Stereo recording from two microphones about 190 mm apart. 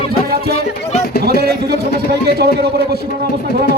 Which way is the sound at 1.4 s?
55° right (ahead or behind).